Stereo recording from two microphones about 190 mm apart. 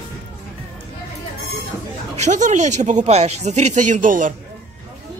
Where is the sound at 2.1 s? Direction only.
40° right (ahead or behind).